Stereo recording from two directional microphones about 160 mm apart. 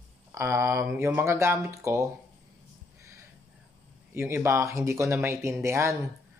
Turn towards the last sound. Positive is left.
turn(degrees=-20)  # may be behind; listen again after turning